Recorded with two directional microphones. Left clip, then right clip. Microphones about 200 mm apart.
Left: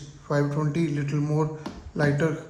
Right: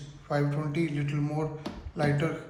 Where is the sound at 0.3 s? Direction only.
45° left (ahead or behind).